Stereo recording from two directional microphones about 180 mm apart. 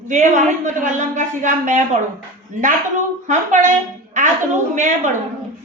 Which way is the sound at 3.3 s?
40° right (ahead or behind).